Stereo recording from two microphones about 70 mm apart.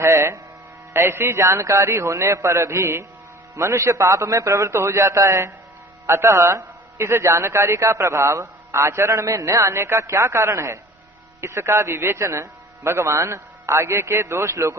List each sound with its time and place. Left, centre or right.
0.0 s music: right
0.9 s a man's voice: right
7.0 s a man's voice: right